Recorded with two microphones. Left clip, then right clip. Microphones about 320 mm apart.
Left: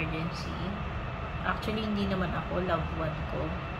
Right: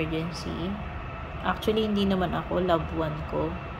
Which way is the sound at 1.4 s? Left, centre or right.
Right.